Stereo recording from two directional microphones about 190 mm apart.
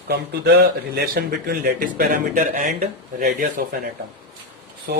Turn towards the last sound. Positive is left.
turn(degrees=-60)  # may be behind; listen again after turning